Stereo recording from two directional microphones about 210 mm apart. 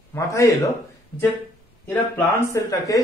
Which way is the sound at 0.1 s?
15° left (ahead or behind).